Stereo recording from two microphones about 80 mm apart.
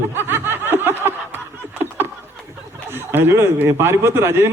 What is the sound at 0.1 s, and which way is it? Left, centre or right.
Snicker, right.